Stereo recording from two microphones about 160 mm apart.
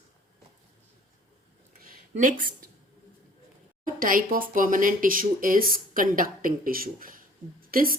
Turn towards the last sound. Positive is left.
turn(degrees=-65)  # may be behind; listen again after turning